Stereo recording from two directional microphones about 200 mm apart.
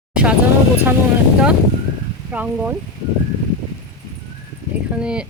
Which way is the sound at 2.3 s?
10° right (ahead or behind).